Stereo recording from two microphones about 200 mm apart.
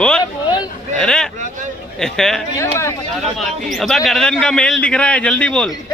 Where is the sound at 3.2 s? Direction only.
Centre (ahead or behind).